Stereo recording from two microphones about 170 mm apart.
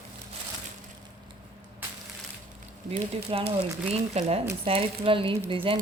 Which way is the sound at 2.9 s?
35° right (ahead or behind).